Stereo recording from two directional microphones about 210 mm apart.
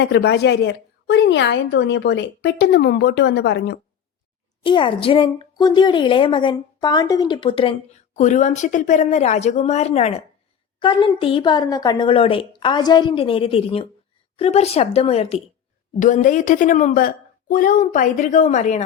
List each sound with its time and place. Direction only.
0.0 s a woman's voice: 55° left (ahead or behind)
4.6 s a woman's voice: 25° left (ahead or behind)